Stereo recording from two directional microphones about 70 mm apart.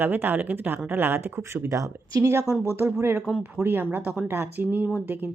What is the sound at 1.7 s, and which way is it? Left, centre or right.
Speech, right.